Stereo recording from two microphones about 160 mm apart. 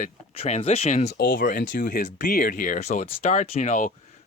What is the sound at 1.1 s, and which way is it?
Speech, 90° left.